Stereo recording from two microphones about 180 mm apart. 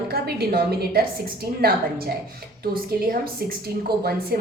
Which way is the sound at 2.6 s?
55° right (ahead or behind).